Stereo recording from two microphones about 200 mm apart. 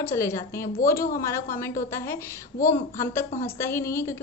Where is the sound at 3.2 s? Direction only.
35° left (ahead or behind).